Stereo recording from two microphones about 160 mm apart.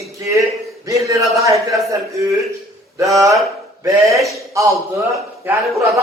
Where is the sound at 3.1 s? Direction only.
20° right (ahead or behind).